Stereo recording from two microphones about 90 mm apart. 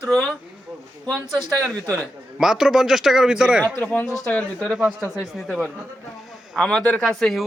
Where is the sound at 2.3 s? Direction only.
5° right (ahead or behind).